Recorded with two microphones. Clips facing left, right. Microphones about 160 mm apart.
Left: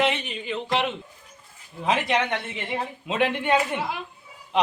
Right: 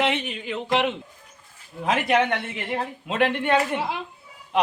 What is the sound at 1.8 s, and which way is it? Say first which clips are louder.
Speech: right 2 dB; 5° right (ahead or behind).